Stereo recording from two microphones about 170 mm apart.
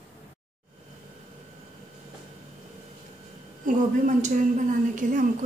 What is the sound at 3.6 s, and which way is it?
A woman's voice, 45° right (ahead or behind).